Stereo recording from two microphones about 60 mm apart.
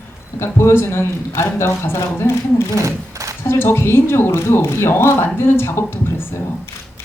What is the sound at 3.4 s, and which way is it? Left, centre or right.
A woman's voice, left.